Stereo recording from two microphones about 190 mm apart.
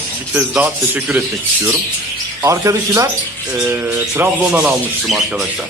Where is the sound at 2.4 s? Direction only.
15° right (ahead or behind); by 5.5 s centre (ahead or behind).